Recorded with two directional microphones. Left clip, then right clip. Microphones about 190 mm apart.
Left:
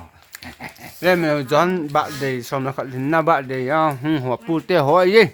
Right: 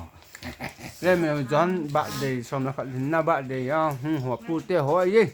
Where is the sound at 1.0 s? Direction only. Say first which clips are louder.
Left 5 dB; 60° left (ahead or behind).